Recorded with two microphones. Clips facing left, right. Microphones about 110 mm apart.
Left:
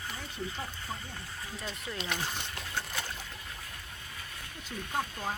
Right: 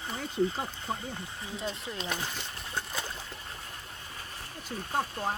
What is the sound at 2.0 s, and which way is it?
Speech, 35° right (ahead or behind).